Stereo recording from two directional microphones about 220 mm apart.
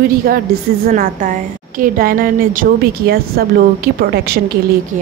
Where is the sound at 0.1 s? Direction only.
45° right (ahead or behind).